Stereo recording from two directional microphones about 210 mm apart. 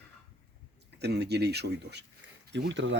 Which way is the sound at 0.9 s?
50° right (ahead or behind).